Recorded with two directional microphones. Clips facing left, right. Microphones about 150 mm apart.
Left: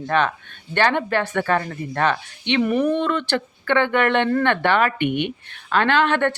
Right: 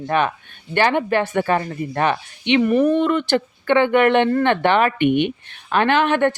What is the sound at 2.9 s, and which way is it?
A woman's voice, 15° right (ahead or behind).